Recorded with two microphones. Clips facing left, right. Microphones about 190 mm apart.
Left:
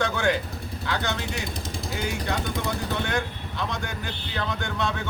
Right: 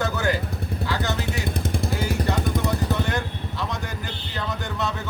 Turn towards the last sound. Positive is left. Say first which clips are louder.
# even
turn(degrees=0)  # may be behind; listen again after turning